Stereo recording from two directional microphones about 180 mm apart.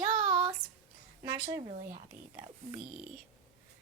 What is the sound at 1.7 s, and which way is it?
Speech, 50° right (ahead or behind).